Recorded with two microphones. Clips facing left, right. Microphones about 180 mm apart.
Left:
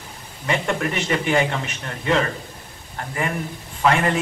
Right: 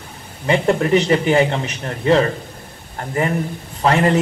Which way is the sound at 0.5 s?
30° right (ahead or behind).